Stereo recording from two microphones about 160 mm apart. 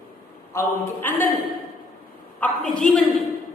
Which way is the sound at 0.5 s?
15° left (ahead or behind).